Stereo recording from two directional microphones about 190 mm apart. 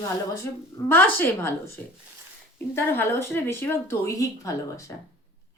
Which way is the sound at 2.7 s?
15° left (ahead or behind).